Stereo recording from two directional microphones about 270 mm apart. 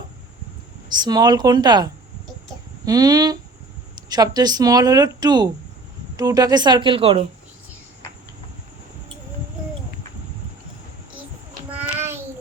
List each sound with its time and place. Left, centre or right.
1.0 s speech: centre
11.7 s child singing: centre